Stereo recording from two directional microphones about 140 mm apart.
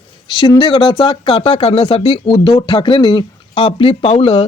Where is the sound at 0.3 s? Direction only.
30° left (ahead or behind).